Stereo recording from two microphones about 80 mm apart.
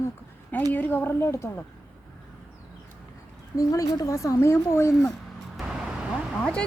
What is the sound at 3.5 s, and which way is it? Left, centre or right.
Speech, left.